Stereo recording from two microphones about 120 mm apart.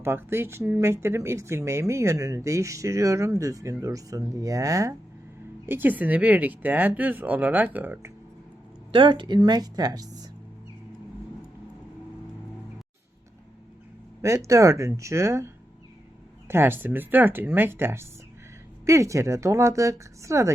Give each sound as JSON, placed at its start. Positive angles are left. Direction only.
{"t": 0.0, "sound": "speech", "side_deg": -20}
{"t": 5.6, "sound": "speech", "side_deg": -15}
{"t": 8.9, "sound": "speech", "side_deg": -45}
{"t": 14.2, "sound": "speech", "side_deg": -25}
{"t": 16.5, "sound": "speech", "side_deg": -20}